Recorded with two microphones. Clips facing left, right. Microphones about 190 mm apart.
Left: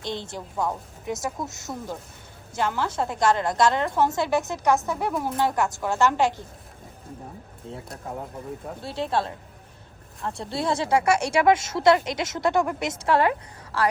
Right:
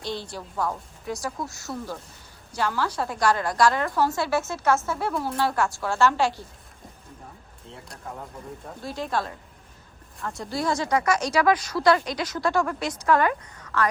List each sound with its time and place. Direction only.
0.0 s speech: 20° left (ahead or behind)
8.8 s speech: 30° left (ahead or behind)